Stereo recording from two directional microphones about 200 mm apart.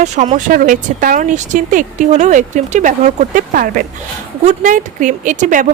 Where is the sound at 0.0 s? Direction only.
35° right (ahead or behind).